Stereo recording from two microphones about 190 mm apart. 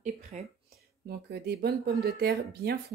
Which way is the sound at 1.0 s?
55° right (ahead or behind).